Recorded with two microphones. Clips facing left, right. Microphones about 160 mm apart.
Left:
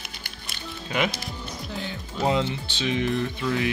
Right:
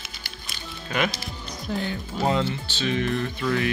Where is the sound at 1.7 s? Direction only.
45° right (ahead or behind).